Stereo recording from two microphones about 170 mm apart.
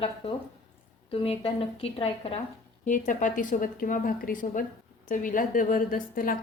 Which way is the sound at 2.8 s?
50° left (ahead or behind).